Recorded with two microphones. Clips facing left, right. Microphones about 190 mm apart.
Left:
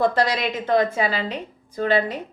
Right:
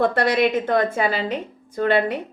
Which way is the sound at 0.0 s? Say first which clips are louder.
Right 2 dB; 60° right (ahead or behind).